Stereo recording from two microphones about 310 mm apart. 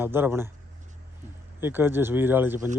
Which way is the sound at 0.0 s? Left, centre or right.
Centre.